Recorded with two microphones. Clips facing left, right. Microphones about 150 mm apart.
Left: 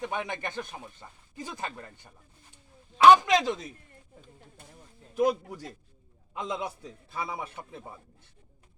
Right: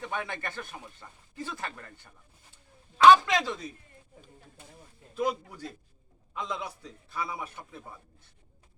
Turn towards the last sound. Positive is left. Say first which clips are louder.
# left 2 dB
turn(degrees=25)  # may be behind; listen again after turning